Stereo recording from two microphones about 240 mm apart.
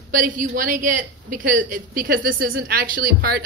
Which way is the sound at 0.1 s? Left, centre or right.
Right.